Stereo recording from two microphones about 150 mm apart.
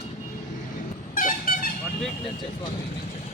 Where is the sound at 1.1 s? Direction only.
65° left (ahead or behind).